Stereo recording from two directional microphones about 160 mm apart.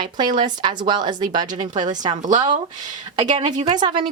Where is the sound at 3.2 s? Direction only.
50° right (ahead or behind).